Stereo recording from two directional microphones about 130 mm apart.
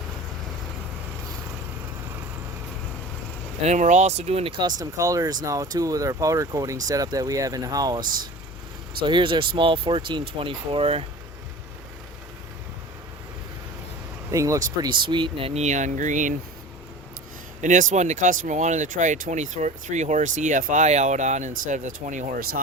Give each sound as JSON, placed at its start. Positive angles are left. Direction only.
{"t": 3.6, "sound": "speech", "side_deg": -65}
{"t": 4.8, "sound": "speech", "side_deg": -25}
{"t": 9.0, "sound": "speech", "side_deg": -40}
{"t": 14.3, "sound": "speech", "side_deg": -25}
{"t": 17.6, "sound": "speech", "side_deg": -75}